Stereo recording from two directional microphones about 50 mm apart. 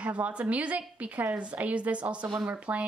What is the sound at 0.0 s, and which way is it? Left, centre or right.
A woman's voice, right.